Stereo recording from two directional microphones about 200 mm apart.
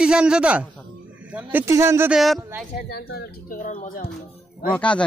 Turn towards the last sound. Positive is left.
turn(degrees=5)  # may be behind; listen again after turning